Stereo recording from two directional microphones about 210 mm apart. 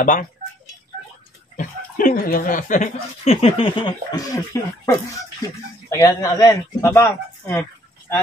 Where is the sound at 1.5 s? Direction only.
40° left (ahead or behind).